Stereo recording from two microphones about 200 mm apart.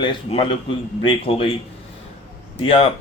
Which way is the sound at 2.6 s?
25° left (ahead or behind).